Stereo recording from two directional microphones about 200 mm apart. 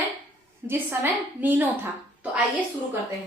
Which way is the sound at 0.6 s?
10° right (ahead or behind).